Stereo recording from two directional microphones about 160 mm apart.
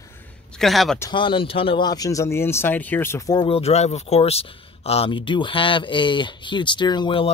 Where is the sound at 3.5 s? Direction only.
40° left (ahead or behind).